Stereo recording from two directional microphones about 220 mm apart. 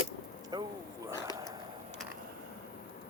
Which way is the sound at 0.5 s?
20° right (ahead or behind).